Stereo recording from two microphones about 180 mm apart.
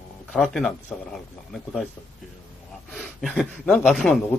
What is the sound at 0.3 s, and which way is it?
Speech, centre (ahead or behind).